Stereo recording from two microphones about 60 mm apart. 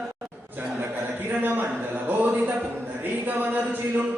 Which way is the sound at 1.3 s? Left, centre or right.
Right.